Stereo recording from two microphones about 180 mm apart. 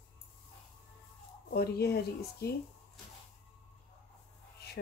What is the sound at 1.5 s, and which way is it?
Speech, 60° left (ahead or behind).